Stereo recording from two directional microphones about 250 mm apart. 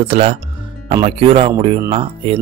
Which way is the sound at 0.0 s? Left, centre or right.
Right.